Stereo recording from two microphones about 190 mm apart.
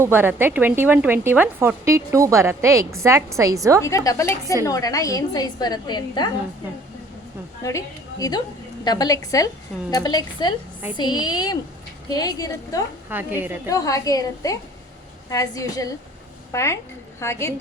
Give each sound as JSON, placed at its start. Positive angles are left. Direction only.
{"t": 0.0, "sound": "a woman's voice", "side_deg": -10}
{"t": 3.8, "sound": "a woman's voice", "side_deg": 15}
{"t": 7.6, "sound": "a woman's voice", "side_deg": 15}
{"t": 13.1, "sound": "a woman's voice", "side_deg": -10}
{"t": 13.7, "sound": "a woman's voice", "side_deg": 20}